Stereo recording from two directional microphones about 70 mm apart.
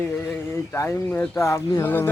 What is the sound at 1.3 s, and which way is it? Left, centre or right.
Speech, left.